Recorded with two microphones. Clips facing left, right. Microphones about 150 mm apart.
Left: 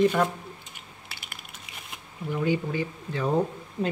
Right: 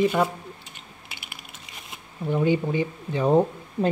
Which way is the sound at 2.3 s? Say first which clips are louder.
Right 4 dB; 20° right (ahead or behind).